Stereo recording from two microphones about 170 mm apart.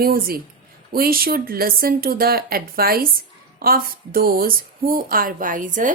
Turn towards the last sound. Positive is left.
turn(degrees=-50)  # may be behind; listen again after turning